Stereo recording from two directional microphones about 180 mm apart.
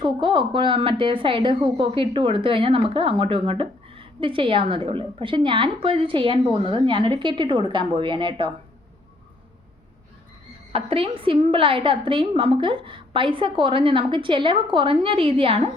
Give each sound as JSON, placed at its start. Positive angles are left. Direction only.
{"t": 0.0, "sound": "a woman's voice", "side_deg": -30}
{"t": 10.7, "sound": "a woman's voice", "side_deg": -30}